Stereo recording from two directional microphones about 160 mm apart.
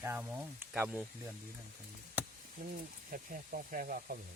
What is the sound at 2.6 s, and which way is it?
Speech, 60° right (ahead or behind).